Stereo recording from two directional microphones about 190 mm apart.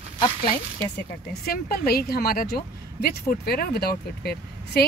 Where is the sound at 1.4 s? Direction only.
55° left (ahead or behind).